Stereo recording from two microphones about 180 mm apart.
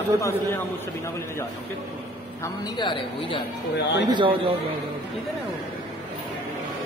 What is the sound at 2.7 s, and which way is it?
Speech, 25° left (ahead or behind).